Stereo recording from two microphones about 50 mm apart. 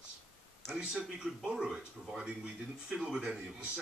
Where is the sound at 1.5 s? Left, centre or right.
Centre.